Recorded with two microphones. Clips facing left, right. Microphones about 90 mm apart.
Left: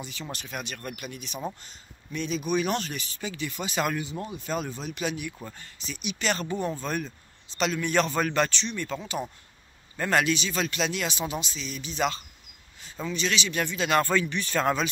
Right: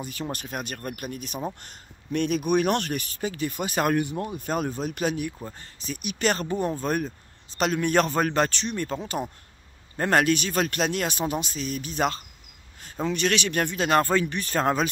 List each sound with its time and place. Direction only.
0.0 s speech: 45° right (ahead or behind)
1.6 s speech: 55° right (ahead or behind)
9.9 s speech: 45° right (ahead or behind)
13.1 s speech: 55° right (ahead or behind); by 14.9 s 40° right (ahead or behind)